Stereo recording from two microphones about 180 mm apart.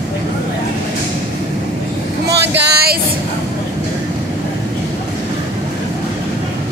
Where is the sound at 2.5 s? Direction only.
65° right (ahead or behind).